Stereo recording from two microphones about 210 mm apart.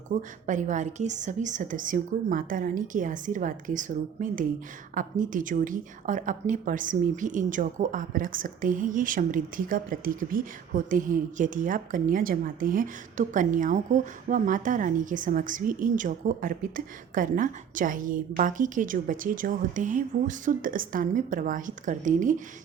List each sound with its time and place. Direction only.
0.2 s a woman's voice: 35° right (ahead or behind)